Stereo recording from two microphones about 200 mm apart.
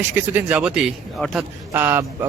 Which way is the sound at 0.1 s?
10° right (ahead or behind).